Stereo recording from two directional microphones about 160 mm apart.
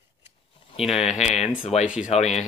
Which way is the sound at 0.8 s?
5° right (ahead or behind).